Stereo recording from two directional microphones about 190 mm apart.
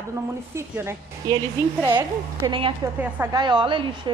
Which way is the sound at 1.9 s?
25° right (ahead or behind).